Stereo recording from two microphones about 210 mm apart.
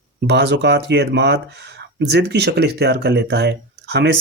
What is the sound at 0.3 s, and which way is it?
Speech, 50° right (ahead or behind).